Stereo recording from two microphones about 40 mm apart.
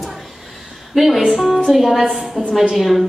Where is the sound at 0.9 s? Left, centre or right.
Centre.